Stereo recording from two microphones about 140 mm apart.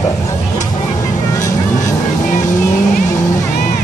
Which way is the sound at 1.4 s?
25° left (ahead or behind).